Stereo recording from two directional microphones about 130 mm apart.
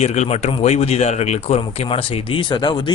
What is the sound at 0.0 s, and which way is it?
Speech, 55° left (ahead or behind).